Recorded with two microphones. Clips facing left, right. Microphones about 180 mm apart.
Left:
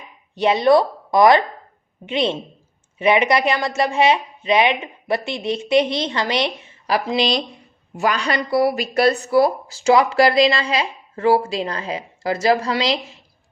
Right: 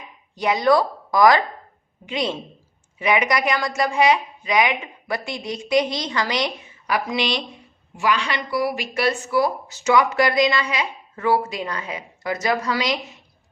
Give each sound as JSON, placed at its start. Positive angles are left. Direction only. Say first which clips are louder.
{"t": 0.3, "sound": "a woman's voice", "louder": "left 3 dB", "side_deg": 25}